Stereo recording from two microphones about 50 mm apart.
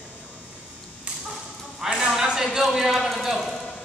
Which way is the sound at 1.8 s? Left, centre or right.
Centre.